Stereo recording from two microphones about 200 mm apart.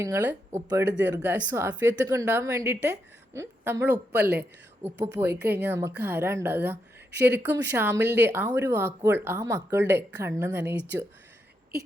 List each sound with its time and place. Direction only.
0.0 s a woman's voice: 10° right (ahead or behind)
0.9 s speech: 60° right (ahead or behind)
1.1 s a woman's voice: 15° right (ahead or behind)